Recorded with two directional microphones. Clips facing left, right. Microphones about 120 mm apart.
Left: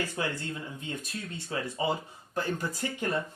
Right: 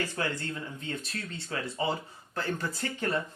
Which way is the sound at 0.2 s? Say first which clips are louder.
Even; 15° left (ahead or behind).